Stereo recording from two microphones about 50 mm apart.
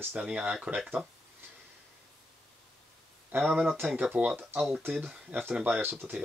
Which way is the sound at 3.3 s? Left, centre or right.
Right.